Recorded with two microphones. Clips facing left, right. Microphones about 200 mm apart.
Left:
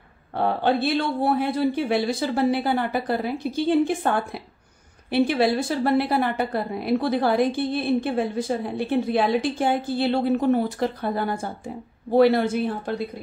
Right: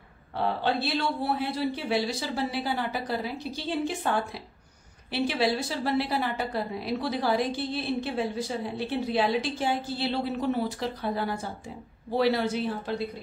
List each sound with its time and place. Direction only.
0.3 s a woman's voice: 55° left (ahead or behind)